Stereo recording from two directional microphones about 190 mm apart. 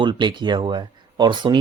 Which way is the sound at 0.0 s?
25° right (ahead or behind).